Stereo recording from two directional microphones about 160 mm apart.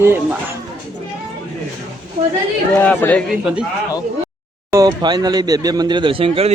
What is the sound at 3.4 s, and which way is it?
Speech, 5° right (ahead or behind).